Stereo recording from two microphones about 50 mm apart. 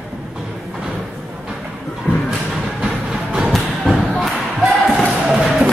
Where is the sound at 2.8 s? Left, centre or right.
Right.